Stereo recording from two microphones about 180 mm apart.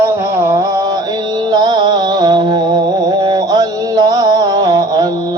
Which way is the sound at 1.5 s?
25° right (ahead or behind).